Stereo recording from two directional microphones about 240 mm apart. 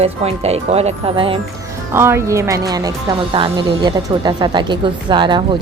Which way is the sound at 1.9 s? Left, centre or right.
Centre.